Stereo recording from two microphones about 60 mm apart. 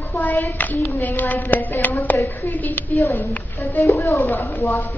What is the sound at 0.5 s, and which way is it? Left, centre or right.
A woman's voice, left.